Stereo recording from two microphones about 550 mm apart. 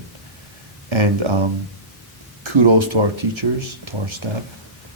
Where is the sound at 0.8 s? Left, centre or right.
Right.